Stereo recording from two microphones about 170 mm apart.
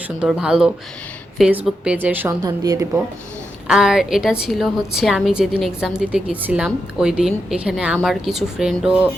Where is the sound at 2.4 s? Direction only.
20° right (ahead or behind).